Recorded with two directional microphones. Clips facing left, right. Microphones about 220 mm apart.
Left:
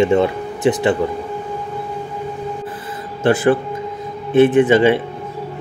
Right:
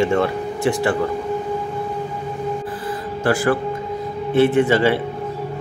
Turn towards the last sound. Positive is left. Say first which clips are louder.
# left 4 dB
turn(degrees=20)  # may be behind; listen again after turning